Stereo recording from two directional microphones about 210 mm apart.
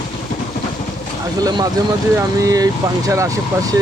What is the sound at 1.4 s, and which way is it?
Speech, 20° right (ahead or behind).